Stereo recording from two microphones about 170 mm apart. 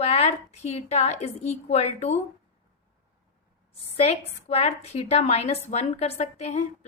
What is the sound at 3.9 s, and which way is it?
A woman's voice, 35° left (ahead or behind).